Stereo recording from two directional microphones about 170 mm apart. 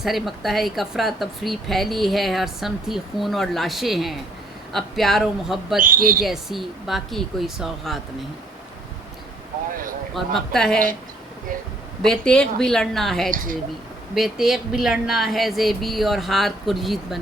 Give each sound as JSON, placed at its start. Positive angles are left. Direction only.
{"t": 0.0, "sound": "a woman's voice", "side_deg": 0}
{"t": 5.8, "sound": "speech", "side_deg": -55}
{"t": 6.2, "sound": "a woman's voice", "side_deg": 0}
{"t": 10.2, "sound": "a woman's voice", "side_deg": 0}
{"t": 12.0, "sound": "a woman's voice", "side_deg": 5}
{"t": 13.3, "sound": "speech", "side_deg": -55}
{"t": 14.2, "sound": "a woman's voice", "side_deg": 0}